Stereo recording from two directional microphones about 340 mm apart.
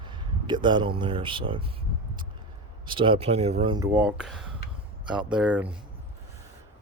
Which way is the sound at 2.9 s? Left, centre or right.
Centre.